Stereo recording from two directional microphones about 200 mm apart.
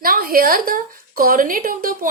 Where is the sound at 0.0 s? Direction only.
45° right (ahead or behind).